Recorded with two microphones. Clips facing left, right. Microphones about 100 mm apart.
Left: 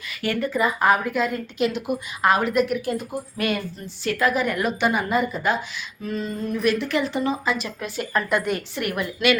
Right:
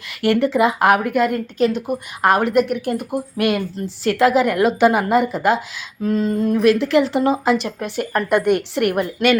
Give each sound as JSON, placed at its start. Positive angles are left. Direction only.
{"t": 0.2, "sound": "a woman's voice", "side_deg": -80}
{"t": 1.5, "sound": "a woman's voice", "side_deg": -40}
{"t": 2.2, "sound": "a woman's voice", "side_deg": -65}
{"t": 4.0, "sound": "a woman's voice", "side_deg": -90}
{"t": 7.8, "sound": "a woman's voice", "side_deg": -55}
{"t": 9.0, "sound": "a woman's voice", "side_deg": -45}